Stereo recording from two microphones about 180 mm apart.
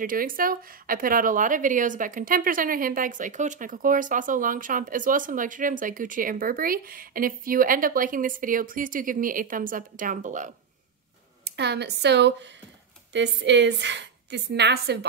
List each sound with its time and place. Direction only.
0.0 s a woman's voice: 50° right (ahead or behind)
11.4 s a woman's voice: 70° right (ahead or behind)